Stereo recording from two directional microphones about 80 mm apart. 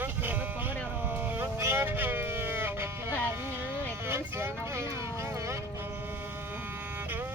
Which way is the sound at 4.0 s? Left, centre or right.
Right.